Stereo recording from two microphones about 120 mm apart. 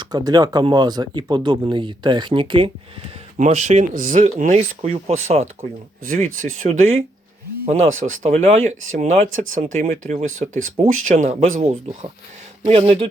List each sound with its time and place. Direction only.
0.0 s speech: 35° right (ahead or behind)
3.3 s speech: 75° right (ahead or behind)
6.1 s speech: 90° right
8.2 s speech: 60° right (ahead or behind)
12.6 s speech: 50° right (ahead or behind)